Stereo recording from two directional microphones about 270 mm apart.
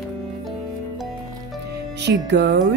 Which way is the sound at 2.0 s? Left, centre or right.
Right.